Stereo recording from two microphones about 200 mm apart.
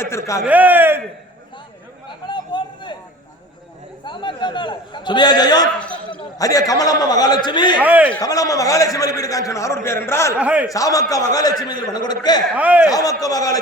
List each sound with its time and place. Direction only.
0.0 s a man's voice: 15° left (ahead or behind)
0.4 s speech: 10° right (ahead or behind)
2.2 s a sound: 25° left (ahead or behind)
4.0 s a man's voice: 25° left (ahead or behind)
5.8 s a sound: 5° left (ahead or behind)
6.4 s a man's voice: 15° left (ahead or behind)
7.8 s speech: 10° right (ahead or behind)
8.2 s a man's voice: 15° left (ahead or behind)
10.3 s speech: 5° right (ahead or behind)
10.7 s a man's voice: 15° left (ahead or behind)
12.5 s speech: 5° right (ahead or behind)
12.9 s a man's voice: 20° left (ahead or behind)